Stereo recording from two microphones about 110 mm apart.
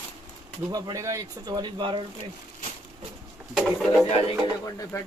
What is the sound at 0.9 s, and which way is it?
Speech, 30° right (ahead or behind).